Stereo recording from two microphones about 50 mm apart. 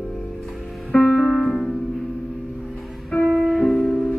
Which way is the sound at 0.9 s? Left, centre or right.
Left.